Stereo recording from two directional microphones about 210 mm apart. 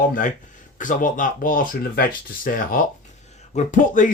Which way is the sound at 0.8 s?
40° left (ahead or behind).